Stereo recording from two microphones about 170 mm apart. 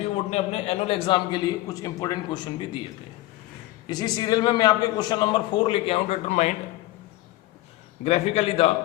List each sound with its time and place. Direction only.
0.0 s a man's voice: 40° left (ahead or behind)
3.8 s a man's voice: 25° left (ahead or behind); by 6.5 s 45° left (ahead or behind)
8.0 s a man's voice: 35° left (ahead or behind)